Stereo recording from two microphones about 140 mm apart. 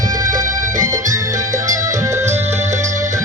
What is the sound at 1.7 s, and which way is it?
Music, 25° right (ahead or behind).